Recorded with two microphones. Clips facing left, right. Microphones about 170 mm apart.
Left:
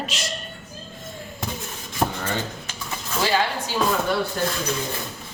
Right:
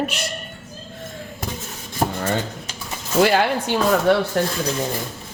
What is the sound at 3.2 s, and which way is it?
Speech, 60° right (ahead or behind).